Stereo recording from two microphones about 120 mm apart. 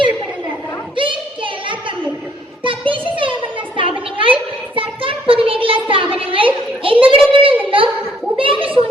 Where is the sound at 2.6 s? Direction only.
45° right (ahead or behind).